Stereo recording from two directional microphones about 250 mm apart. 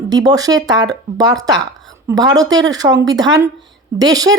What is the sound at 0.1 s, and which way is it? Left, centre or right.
Speech, centre.